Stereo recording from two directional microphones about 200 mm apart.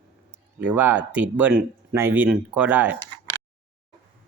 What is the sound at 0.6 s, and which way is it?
Speech, 10° right (ahead or behind).